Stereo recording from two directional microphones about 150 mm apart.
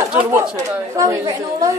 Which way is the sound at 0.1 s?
5° right (ahead or behind).